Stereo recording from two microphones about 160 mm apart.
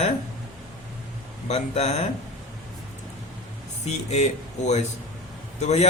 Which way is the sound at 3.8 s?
45° left (ahead or behind).